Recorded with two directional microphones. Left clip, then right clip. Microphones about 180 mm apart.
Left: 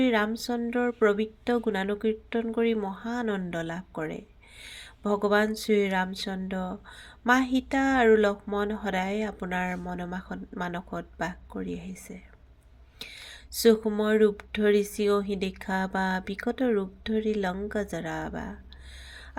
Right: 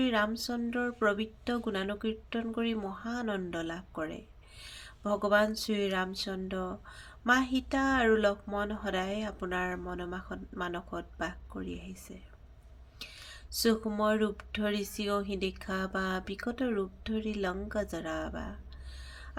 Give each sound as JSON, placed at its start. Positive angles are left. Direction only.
{"t": 0.0, "sound": "speech", "side_deg": 25}